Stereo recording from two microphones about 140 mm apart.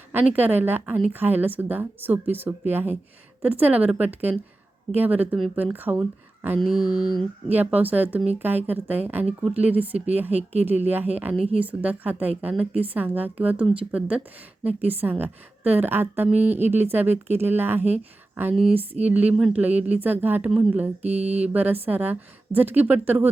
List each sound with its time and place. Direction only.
0.1 s a woman's voice: 15° right (ahead or behind)
6.6 s mantra: centre (ahead or behind)
6.8 s mantra: 30° left (ahead or behind)
7.4 s a woman's voice: 10° right (ahead or behind)
18.7 s mantra: 45° right (ahead or behind)
19.0 s a woman's voice: 10° right (ahead or behind)
21.0 s mantra: 50° right (ahead or behind)
21.4 s a woman's voice: 10° right (ahead or behind)